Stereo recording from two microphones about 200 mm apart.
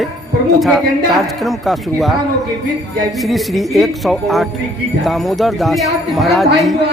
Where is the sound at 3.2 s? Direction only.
Centre (ahead or behind).